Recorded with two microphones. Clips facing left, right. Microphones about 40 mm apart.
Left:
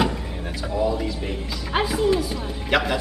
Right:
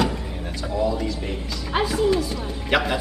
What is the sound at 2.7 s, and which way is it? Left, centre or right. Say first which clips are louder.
Speech: even; centre.